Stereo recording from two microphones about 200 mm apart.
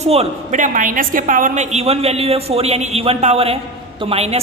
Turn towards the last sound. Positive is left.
turn(degrees=-30)  # may be behind; listen again after turning